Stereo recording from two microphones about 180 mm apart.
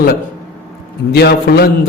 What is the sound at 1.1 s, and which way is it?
Speech, 65° left (ahead or behind).